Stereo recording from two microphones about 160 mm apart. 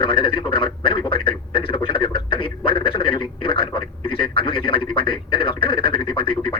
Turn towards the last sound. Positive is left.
turn(degrees=35)  # may be behind; listen again after turning